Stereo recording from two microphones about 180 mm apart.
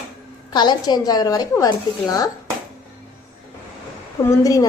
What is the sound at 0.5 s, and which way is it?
A woman's voice, 25° left (ahead or behind).